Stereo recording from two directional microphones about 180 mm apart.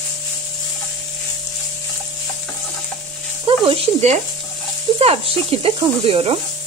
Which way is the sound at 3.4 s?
30° right (ahead or behind).